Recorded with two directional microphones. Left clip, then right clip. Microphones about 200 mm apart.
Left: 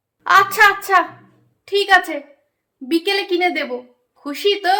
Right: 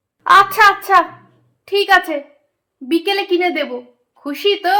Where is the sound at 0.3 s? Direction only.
Centre (ahead or behind).